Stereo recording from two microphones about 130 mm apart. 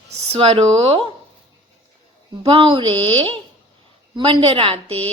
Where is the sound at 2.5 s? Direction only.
40° right (ahead or behind).